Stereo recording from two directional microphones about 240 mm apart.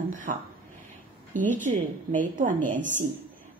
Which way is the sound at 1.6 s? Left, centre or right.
Right.